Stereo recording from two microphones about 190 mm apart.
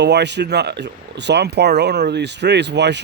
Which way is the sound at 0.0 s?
65° right (ahead or behind).